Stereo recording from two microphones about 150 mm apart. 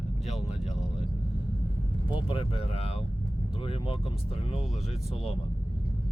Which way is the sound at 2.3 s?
35° left (ahead or behind).